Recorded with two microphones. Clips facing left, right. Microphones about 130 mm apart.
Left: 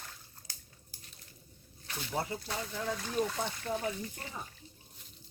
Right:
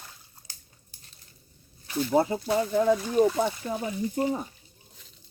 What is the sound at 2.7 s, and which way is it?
Speech, 55° right (ahead or behind).